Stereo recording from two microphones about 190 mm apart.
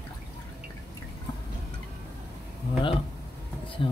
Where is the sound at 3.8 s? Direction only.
25° left (ahead or behind).